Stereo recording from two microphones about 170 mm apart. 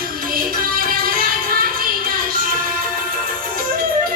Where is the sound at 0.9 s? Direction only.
55° right (ahead or behind).